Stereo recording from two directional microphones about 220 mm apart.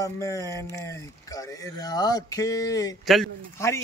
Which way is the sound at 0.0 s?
15° left (ahead or behind).